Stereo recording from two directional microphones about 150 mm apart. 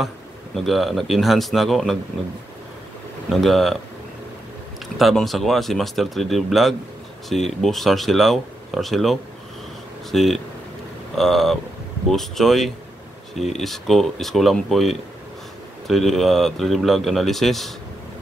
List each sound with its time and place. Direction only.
0.6 s speech: centre (ahead or behind)
3.3 s speech: centre (ahead or behind)
4.9 s speech: centre (ahead or behind)